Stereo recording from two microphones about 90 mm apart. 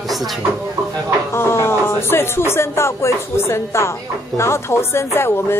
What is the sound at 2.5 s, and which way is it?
Speech, 30° left (ahead or behind).